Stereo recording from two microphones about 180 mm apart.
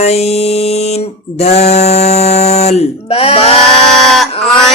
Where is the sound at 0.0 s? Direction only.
35° left (ahead or behind).